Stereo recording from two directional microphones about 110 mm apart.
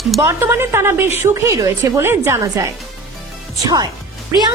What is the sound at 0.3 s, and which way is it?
A woman's voice, 25° right (ahead or behind).